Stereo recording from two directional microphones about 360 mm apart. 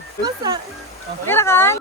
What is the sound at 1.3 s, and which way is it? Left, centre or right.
Speech, centre.